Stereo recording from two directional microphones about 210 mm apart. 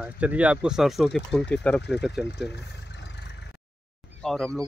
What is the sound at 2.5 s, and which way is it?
Vehicle, 55° left (ahead or behind).